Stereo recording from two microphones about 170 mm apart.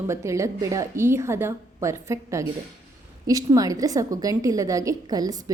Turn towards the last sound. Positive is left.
turn(degrees=-20)  # may be behind; listen again after turning